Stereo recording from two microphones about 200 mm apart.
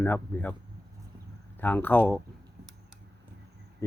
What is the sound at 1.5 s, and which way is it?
Speech, 10° left (ahead or behind).